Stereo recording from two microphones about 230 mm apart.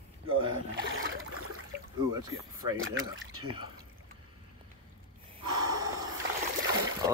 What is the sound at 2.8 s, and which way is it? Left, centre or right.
Speech, right.